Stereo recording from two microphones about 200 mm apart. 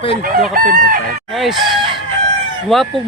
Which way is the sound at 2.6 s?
Centre (ahead or behind).